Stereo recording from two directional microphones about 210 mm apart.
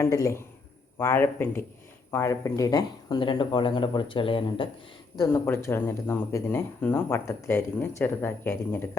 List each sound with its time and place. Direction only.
0.0 s speech: 15° left (ahead or behind)
5.1 s speech: 15° left (ahead or behind)